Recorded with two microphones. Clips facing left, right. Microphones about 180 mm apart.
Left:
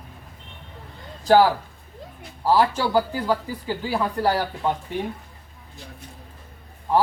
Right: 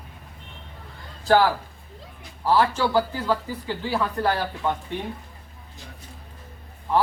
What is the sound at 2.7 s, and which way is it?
Speech, 10° left (ahead or behind).